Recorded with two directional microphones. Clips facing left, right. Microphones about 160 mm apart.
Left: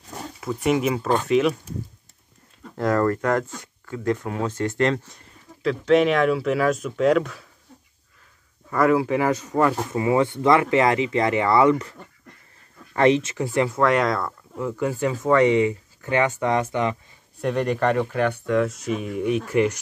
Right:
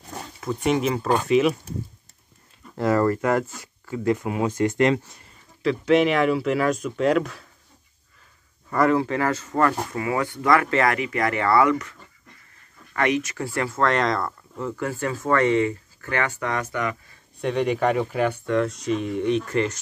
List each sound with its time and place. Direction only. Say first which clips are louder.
0.4 s speech: left 1 dB; 5° left (ahead or behind)
2.8 s speech: even; 5° right (ahead or behind)
8.6 s speech: left 1 dB; 5° left (ahead or behind); by 11.9 s 25° left (ahead or behind)
12.9 s speech: left 5 dB; 30° left (ahead or behind)
17.4 s speech: even; centre (ahead or behind)